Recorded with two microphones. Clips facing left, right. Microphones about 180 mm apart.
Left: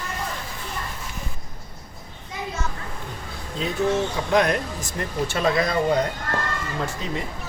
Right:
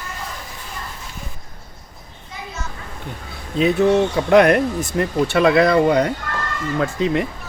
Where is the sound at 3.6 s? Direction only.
65° right (ahead or behind).